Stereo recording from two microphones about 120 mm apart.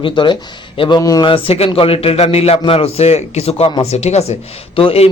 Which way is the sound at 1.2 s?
45° left (ahead or behind).